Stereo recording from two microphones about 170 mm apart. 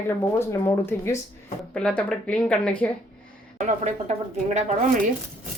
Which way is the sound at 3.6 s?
45° right (ahead or behind).